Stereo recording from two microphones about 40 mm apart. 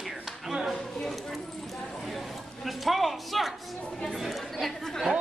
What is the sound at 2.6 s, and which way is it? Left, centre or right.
Speech, centre.